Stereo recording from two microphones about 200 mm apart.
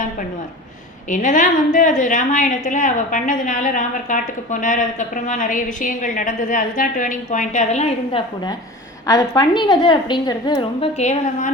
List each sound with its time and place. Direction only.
1.1 s a woman's voice: 40° left (ahead or behind)
9.0 s a woman's voice: 20° left (ahead or behind); by 11.5 s 35° left (ahead or behind)